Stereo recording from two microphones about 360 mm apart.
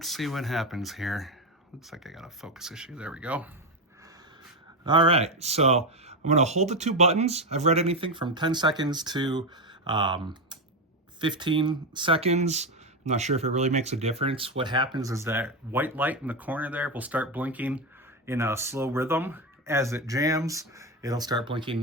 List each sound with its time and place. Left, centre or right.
0.0 s speech: centre
4.9 s speech: centre